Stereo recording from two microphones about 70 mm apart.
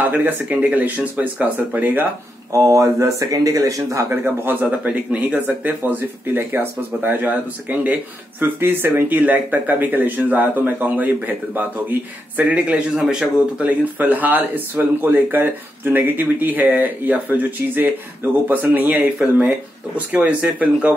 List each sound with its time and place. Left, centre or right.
0.0 s speech: right
2.5 s speech: right
4.1 s speech: right
12.9 s speech: centre
20.1 s speech: centre